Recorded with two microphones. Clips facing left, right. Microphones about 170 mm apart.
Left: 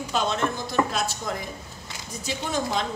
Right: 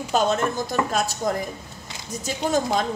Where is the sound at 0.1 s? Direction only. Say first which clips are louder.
Right 5 dB; 45° right (ahead or behind).